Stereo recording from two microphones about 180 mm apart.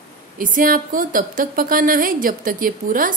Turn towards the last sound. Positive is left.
turn(degrees=-50)  # may be behind; listen again after turning